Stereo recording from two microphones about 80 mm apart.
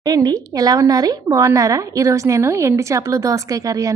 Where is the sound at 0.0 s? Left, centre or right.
Right.